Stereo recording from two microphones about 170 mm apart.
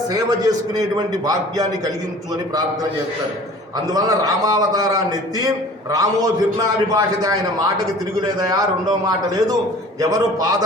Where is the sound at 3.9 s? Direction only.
20° right (ahead or behind).